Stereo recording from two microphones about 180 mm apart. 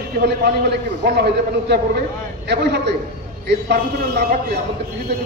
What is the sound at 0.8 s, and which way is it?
A man's voice, 70° right (ahead or behind).